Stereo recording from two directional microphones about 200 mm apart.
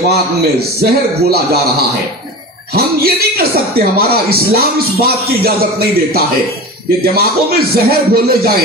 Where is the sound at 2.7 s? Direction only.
50° right (ahead or behind).